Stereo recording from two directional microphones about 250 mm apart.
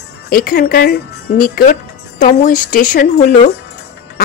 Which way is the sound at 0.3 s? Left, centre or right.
Left.